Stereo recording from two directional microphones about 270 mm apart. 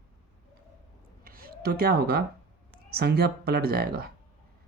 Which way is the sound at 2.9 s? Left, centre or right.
Right.